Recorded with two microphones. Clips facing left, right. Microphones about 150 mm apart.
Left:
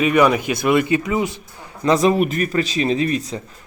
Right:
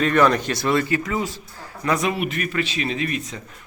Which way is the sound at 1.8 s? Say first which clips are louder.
Left 7 dB; 30° left (ahead or behind).